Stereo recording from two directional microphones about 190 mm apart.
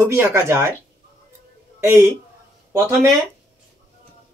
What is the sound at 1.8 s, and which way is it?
Speech, 15° right (ahead or behind).